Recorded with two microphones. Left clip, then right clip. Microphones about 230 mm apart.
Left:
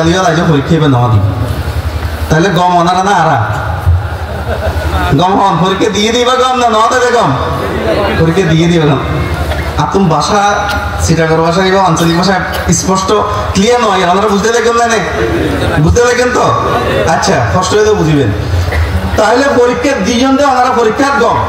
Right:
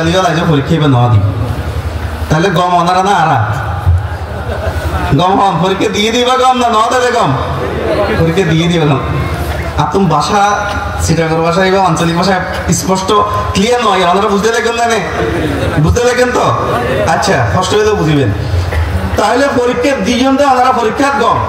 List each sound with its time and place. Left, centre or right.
0.0 s a man's voice: right
2.2 s a man's voice: right
5.1 s a man's voice: right
8.4 s a man's voice: right
19.1 s a man's voice: right